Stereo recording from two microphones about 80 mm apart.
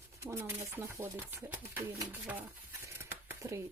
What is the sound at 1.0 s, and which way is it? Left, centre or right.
Speech, right.